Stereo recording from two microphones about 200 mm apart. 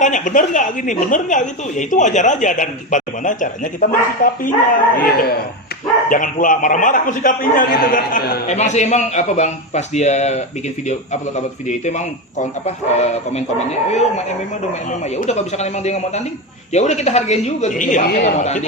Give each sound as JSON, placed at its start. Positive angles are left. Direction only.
{"t": 0.0, "sound": "a woman's voice", "side_deg": 40}
{"t": 18.3, "sound": "a woman's voice", "side_deg": 35}